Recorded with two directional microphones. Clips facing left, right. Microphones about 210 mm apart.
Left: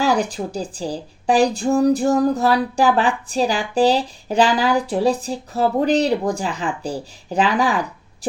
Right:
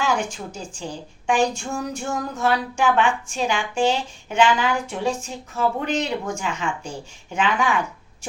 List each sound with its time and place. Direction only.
0.0 s speech: 35° left (ahead or behind)